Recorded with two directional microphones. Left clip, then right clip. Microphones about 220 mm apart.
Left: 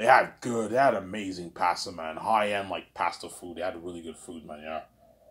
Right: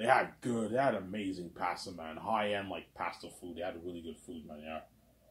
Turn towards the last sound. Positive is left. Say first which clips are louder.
# left 7 dB
turn(degrees=25)  # may be behind; listen again after turning